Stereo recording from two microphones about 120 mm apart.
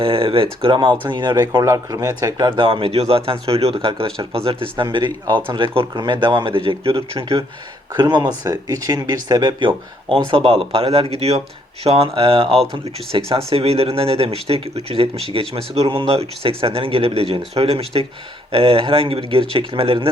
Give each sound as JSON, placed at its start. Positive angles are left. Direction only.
{"t": 0.0, "sound": "speech", "side_deg": -50}
{"t": 2.6, "sound": "speech", "side_deg": -45}
{"t": 7.9, "sound": "speech", "side_deg": -35}